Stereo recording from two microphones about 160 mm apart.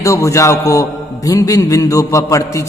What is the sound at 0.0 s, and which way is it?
A man's voice, 20° left (ahead or behind).